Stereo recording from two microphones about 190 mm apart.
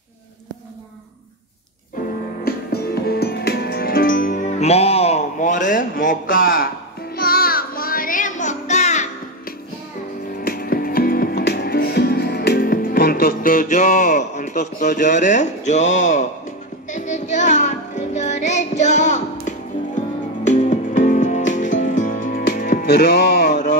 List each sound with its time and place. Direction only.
2.4 s music: 55° left (ahead or behind); by 9.0 s 35° left (ahead or behind)
10.4 s music: 50° left (ahead or behind)
22.8 s music: 60° left (ahead or behind)
23.5 s a sound: 40° left (ahead or behind)